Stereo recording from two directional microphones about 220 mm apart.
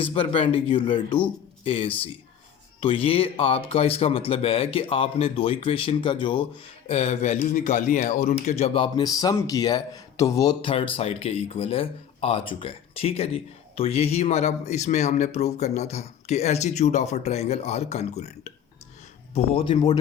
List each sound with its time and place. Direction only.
0.0 s speech: 25° left (ahead or behind)